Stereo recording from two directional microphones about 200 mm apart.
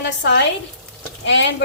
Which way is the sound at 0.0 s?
60° left (ahead or behind).